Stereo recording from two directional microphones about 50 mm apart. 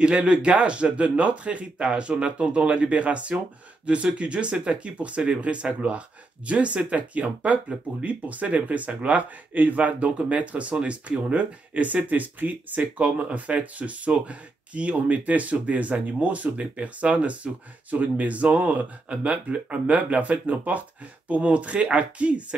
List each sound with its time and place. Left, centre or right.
0.0 s speech: right